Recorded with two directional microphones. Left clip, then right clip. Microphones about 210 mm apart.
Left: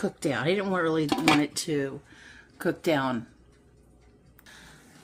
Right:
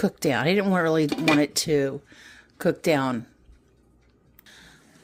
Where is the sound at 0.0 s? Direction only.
50° right (ahead or behind).